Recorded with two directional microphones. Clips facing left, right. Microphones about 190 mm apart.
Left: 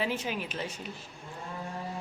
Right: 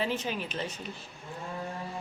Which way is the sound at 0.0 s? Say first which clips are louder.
Right 1 dB; 10° left (ahead or behind).